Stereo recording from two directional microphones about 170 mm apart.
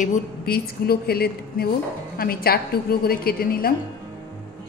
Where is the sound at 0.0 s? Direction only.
65° left (ahead or behind).